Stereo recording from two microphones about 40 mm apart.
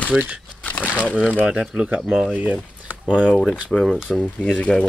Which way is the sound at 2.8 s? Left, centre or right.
Right.